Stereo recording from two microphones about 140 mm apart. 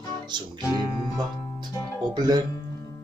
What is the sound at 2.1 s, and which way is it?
Music, 30° right (ahead or behind).